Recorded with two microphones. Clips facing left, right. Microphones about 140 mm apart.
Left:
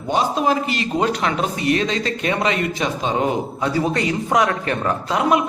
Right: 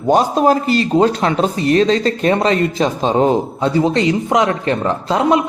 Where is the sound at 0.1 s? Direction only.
40° right (ahead or behind).